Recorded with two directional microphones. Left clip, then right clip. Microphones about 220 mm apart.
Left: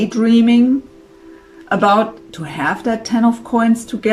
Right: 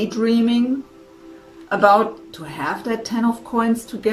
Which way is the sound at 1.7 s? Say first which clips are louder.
Left 1 dB; 30° left (ahead or behind).